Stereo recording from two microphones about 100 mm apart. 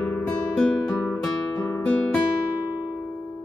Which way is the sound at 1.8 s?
10° left (ahead or behind).